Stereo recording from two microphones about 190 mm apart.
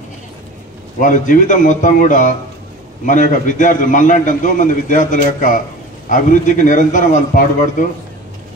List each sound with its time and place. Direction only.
0.9 s a man's voice: 45° left (ahead or behind)